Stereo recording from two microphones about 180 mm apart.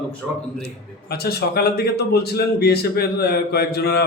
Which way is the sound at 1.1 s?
60° left (ahead or behind).